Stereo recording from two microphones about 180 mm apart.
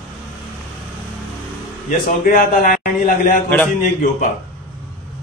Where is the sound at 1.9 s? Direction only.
50° left (ahead or behind).